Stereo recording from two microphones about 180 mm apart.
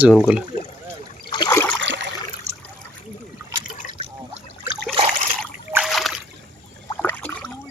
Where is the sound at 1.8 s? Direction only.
85° right.